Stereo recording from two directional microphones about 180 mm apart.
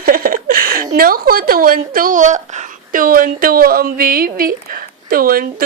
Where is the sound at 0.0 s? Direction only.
55° right (ahead or behind).